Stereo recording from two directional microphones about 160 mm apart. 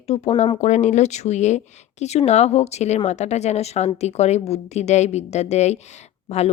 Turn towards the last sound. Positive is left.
turn(degrees=40)  # may be behind; listen again after turning